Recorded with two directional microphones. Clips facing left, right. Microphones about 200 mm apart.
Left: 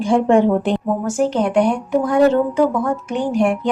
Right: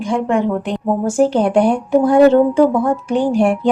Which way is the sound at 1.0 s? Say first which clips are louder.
Right 6 dB; 30° right (ahead or behind).